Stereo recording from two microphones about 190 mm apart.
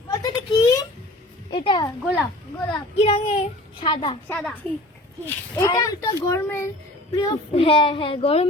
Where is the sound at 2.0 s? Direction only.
5° left (ahead or behind).